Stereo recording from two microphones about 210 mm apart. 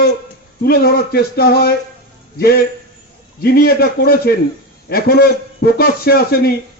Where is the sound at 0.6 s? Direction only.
45° left (ahead or behind).